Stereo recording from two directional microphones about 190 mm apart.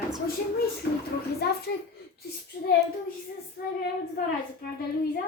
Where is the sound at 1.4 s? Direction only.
55° left (ahead or behind).